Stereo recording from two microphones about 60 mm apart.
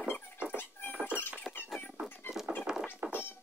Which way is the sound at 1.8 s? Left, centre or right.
Left.